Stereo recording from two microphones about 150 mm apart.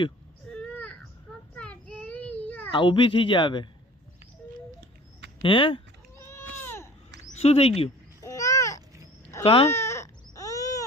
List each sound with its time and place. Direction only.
0.4 s a sound: 5° left (ahead or behind)
1.5 s child singing: 10° left (ahead or behind)
2.7 s speech: 35° left (ahead or behind)
5.4 s speech: 35° left (ahead or behind)
6.1 s a sound: 15° left (ahead or behind)
7.3 s speech: 45° left (ahead or behind)
8.2 s babbling: 20° left (ahead or behind)
9.4 s speech: 35° left (ahead or behind)
9.6 s a sound: 15° left (ahead or behind)